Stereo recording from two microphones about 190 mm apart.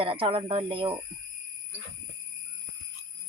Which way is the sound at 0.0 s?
30° right (ahead or behind).